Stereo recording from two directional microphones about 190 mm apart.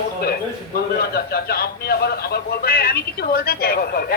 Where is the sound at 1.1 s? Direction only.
55° left (ahead or behind).